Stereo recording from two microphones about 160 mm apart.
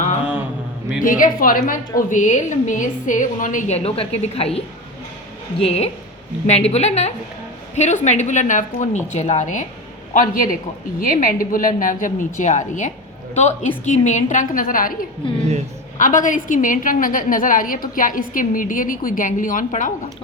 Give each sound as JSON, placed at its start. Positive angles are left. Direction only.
{"t": 1.0, "sound": "a woman's voice", "side_deg": 60}
{"t": 15.4, "sound": "speech", "side_deg": -45}
{"t": 16.0, "sound": "a woman's voice", "side_deg": 55}